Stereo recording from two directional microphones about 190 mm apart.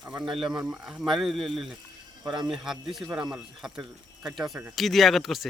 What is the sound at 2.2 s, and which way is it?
Speech, 25° right (ahead or behind).